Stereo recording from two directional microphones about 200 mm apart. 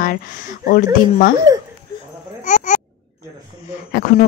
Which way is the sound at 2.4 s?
40° left (ahead or behind).